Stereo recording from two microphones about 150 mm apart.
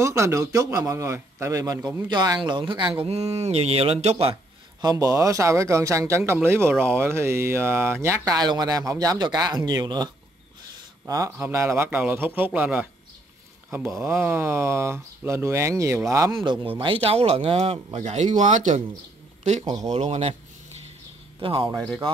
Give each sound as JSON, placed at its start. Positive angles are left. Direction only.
{"t": 0.0, "sound": "speech", "side_deg": -20}
{"t": 3.0, "sound": "speech", "side_deg": -45}
{"t": 4.8, "sound": "a man's voice", "side_deg": -20}
{"t": 13.9, "sound": "speech", "side_deg": -15}
{"t": 16.6, "sound": "speech", "side_deg": -35}
{"t": 19.6, "sound": "speech", "side_deg": -25}
{"t": 19.9, "sound": "speech", "side_deg": -45}
{"t": 21.4, "sound": "speech", "side_deg": -35}